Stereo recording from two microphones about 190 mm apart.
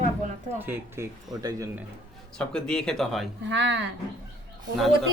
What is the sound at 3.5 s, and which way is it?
Speech, 65° right (ahead or behind).